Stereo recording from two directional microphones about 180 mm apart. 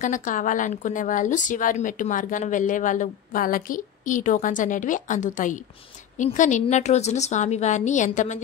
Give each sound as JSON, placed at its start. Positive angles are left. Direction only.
{"t": 0.0, "sound": "a woman's voice", "side_deg": 45}